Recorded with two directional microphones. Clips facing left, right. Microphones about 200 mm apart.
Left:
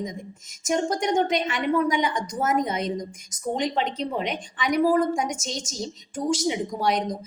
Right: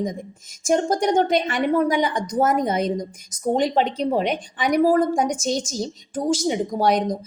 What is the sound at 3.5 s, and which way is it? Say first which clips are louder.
A woman's voice: right 5 dB; 40° right (ahead or behind).